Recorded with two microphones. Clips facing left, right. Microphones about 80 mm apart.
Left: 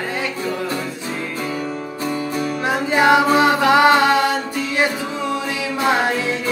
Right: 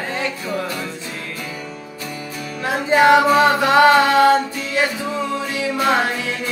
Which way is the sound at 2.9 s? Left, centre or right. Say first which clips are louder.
Right 2 dB; left.